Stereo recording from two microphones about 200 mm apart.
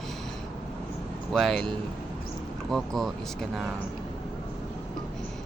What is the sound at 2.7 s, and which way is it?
Speech, centre (ahead or behind).